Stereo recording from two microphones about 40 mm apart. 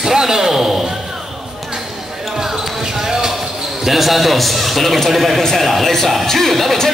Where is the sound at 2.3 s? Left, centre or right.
Centre.